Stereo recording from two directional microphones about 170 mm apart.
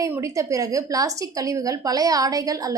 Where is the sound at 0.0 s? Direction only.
20° right (ahead or behind).